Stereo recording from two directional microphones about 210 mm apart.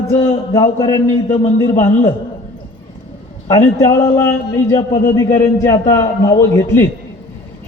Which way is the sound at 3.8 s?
15° left (ahead or behind).